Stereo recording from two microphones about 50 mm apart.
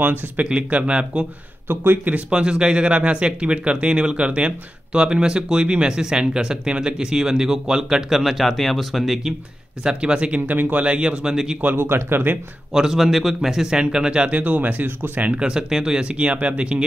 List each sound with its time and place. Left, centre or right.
0.0 s speech: right
0.5 s speech: right
1.7 s speech: right
2.1 s speech: right
8.2 s speech: centre
9.8 s speech: centre
11.6 s speech: right
12.7 s speech: centre